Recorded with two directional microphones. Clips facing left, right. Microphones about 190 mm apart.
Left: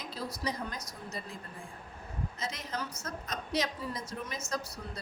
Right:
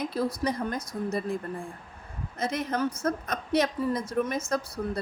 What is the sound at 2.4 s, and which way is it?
A woman's voice, 55° right (ahead or behind).